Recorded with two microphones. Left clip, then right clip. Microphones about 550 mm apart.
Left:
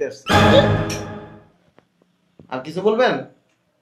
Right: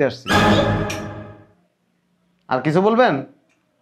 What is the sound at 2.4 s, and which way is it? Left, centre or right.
Speech, right.